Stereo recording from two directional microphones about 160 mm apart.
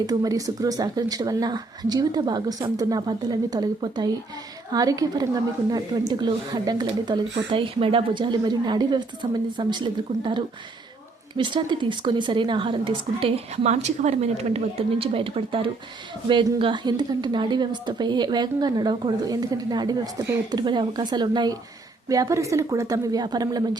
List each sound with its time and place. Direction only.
0.0 s a woman's voice: 25° right (ahead or behind)